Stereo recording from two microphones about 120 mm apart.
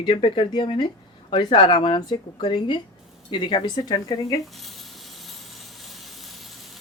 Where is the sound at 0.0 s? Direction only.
50° left (ahead or behind).